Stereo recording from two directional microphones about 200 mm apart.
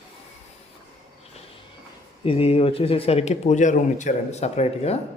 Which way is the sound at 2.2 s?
30° left (ahead or behind).